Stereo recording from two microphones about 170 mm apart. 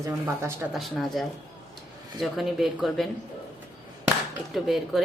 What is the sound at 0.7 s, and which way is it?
A woman's voice, centre (ahead or behind).